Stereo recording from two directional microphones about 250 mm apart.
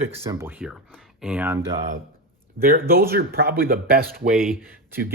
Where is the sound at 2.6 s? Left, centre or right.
Right.